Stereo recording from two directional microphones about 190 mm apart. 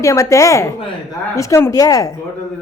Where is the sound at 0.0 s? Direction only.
15° left (ahead or behind).